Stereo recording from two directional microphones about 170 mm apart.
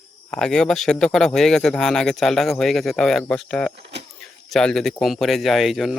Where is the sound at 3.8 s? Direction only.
90° right.